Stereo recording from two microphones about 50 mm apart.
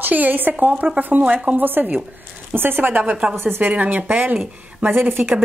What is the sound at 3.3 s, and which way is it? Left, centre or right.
Speech, right.